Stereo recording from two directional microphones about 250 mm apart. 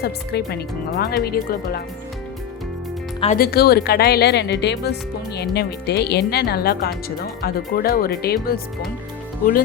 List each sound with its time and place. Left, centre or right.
0.0 s speech: left
3.2 s speech: left